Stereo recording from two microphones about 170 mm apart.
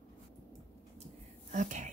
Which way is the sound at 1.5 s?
50° right (ahead or behind).